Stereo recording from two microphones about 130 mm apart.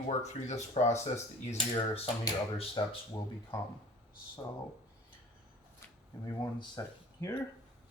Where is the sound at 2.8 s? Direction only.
40° left (ahead or behind).